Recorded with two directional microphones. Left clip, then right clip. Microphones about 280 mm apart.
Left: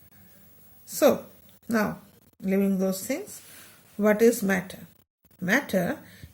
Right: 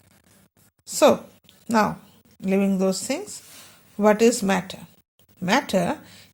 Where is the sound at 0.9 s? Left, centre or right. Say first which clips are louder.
Right 4 dB; centre.